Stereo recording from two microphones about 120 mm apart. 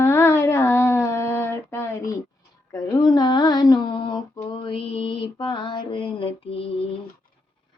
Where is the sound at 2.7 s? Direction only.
35° left (ahead or behind); by 6.7 s 50° left (ahead or behind).